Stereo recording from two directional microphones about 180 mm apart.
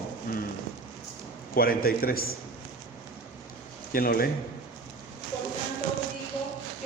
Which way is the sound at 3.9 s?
55° left (ahead or behind).